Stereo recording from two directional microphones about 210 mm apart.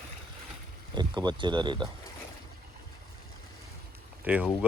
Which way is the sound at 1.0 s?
20° right (ahead or behind).